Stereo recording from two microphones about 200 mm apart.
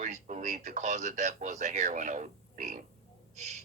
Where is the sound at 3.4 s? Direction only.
35° right (ahead or behind).